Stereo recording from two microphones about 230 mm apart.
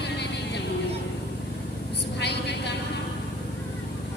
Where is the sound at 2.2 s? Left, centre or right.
Left.